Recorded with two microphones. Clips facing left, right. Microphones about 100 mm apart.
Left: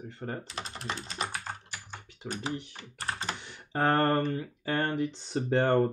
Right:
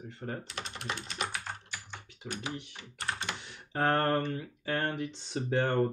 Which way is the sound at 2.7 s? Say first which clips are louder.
Left 1 dB; 40° left (ahead or behind).